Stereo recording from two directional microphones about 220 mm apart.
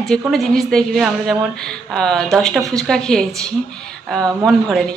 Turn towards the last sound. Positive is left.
turn(degrees=0)  # may be behind; listen again after turning